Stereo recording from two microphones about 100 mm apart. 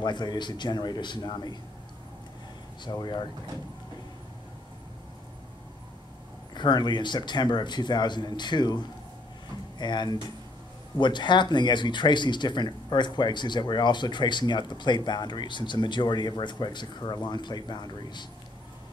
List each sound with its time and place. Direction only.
0.0 s speech: 50° left (ahead or behind)
2.8 s speech: 45° left (ahead or behind)
6.5 s speech: 50° left (ahead or behind)